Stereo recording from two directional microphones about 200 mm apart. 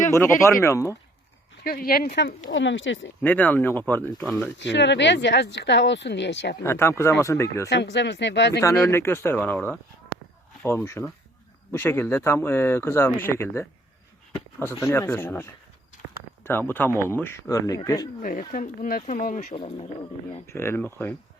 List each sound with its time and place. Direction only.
0.6 s speech: 15° left (ahead or behind)
1.6 s speech: 50° left (ahead or behind)
2.1 s speech: 65° left (ahead or behind)
3.2 s speech: 10° left (ahead or behind)
4.2 s speech: centre (ahead or behind)
4.6 s speech: 65° left (ahead or behind)
6.6 s speech: 10° left (ahead or behind)
7.7 s speech: 60° left (ahead or behind)
8.6 s speech: 15° left (ahead or behind)
10.8 s speech: 15° left (ahead or behind)
18.2 s speech: 40° left (ahead or behind)
19.5 s speech: 30° left (ahead or behind)
20.5 s speech: 10° left (ahead or behind)